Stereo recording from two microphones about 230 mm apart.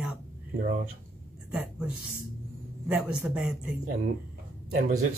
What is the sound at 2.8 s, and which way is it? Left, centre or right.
Speech, centre.